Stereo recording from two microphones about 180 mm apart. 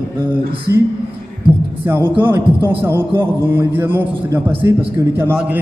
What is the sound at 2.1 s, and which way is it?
A man's voice, 10° right (ahead or behind).